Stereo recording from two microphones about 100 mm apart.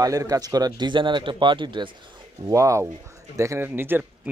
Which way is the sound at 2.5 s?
30° right (ahead or behind).